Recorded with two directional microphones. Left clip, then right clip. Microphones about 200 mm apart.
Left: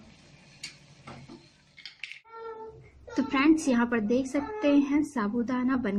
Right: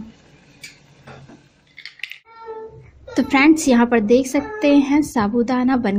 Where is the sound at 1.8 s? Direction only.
25° right (ahead or behind).